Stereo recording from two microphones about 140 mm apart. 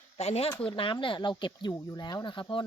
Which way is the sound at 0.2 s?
50° left (ahead or behind).